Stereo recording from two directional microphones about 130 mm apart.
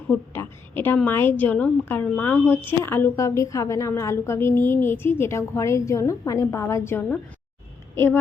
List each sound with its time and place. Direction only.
0.1 s a woman's voice: 15° left (ahead or behind)